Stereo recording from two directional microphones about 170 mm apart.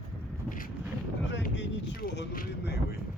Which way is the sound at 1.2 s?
90° left.